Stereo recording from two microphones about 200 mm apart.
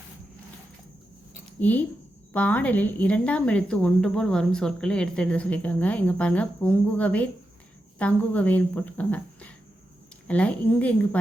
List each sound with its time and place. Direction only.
1.5 s speech: 10° left (ahead or behind)